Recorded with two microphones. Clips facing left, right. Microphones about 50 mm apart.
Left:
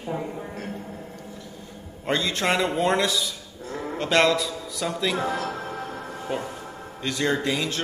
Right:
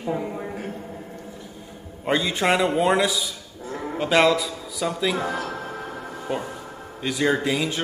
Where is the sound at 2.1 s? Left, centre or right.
Centre.